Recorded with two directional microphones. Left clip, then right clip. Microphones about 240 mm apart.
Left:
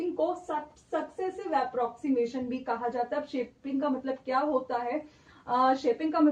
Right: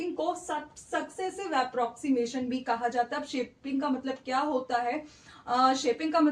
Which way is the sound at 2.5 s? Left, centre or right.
Right.